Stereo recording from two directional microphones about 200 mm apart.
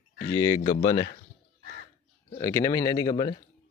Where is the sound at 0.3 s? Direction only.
15° left (ahead or behind).